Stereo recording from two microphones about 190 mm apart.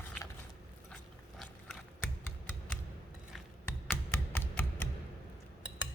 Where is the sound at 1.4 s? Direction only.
5° left (ahead or behind).